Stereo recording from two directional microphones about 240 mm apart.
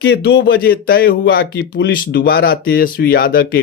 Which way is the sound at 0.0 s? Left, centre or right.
Left.